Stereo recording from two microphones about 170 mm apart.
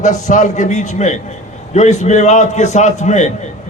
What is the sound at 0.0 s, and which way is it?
A man's voice, 45° left (ahead or behind).